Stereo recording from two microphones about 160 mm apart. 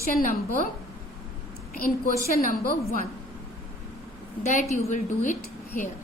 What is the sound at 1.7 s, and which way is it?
A woman's voice, 65° left (ahead or behind).